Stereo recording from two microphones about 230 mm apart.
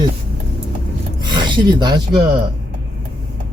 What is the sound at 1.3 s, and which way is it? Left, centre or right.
Speech, centre.